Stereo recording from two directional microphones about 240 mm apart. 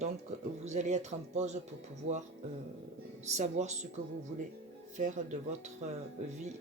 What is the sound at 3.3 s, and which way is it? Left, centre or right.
Speech, right.